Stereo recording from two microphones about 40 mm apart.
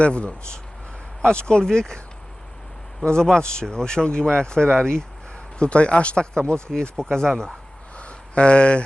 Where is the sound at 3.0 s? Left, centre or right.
Centre.